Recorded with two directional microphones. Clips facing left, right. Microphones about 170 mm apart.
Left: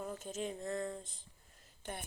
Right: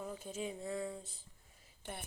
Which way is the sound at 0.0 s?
10° right (ahead or behind).